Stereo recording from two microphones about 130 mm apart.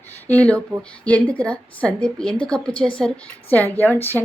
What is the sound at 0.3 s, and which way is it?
A woman's voice, 10° left (ahead or behind).